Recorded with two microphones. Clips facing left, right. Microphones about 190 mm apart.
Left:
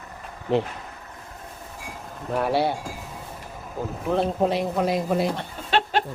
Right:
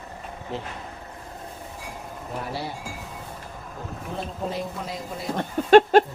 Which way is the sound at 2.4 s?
70° left (ahead or behind).